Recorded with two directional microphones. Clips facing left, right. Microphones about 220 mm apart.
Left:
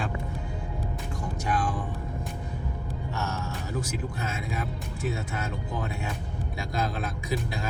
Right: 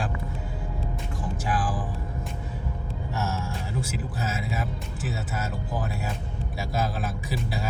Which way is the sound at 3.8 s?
5° right (ahead or behind).